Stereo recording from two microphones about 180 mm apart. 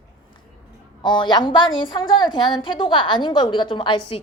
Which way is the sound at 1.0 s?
25° left (ahead or behind).